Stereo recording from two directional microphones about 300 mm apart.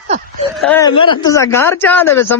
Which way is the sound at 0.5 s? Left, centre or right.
Centre.